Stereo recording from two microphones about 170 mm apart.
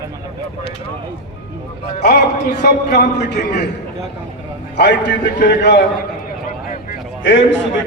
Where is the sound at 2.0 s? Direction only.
70° left (ahead or behind).